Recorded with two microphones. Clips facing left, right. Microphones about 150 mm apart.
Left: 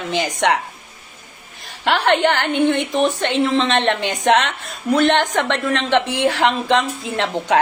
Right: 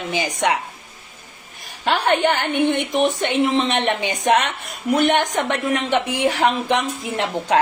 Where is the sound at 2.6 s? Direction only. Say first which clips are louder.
Left 1 dB; 15° right (ahead or behind).